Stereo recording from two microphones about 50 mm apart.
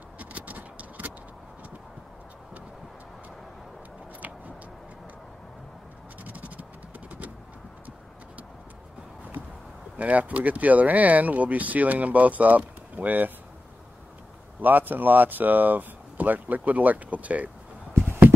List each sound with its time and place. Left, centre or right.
0.2 s a sound: right
6.2 s scratch: right
7.1 s typing: right
9.9 s speech: right
14.6 s speech: right